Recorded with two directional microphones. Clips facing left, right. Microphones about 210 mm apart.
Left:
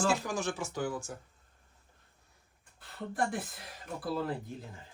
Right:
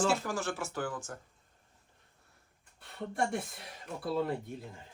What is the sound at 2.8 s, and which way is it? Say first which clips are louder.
Speech: even; centre (ahead or behind).